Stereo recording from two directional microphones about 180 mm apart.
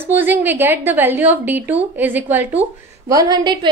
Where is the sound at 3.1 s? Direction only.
20° right (ahead or behind).